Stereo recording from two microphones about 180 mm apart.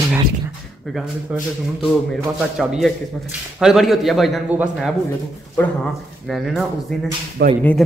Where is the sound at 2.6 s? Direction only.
Centre (ahead or behind).